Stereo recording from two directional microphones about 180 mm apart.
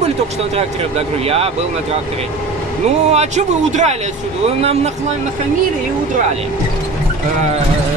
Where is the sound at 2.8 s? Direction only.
35° right (ahead or behind).